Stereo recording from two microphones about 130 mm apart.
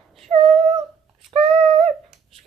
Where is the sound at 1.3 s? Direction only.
45° right (ahead or behind).